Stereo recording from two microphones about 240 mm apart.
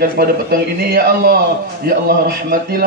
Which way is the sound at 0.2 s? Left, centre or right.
Right.